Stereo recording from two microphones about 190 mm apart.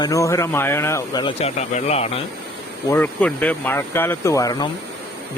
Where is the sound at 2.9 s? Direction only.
10° left (ahead or behind).